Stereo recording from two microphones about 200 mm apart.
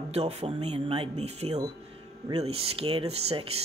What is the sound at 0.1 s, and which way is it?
Speech, 30° right (ahead or behind).